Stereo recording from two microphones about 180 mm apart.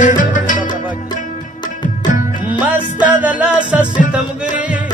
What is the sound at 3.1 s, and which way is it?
Music, 10° right (ahead or behind).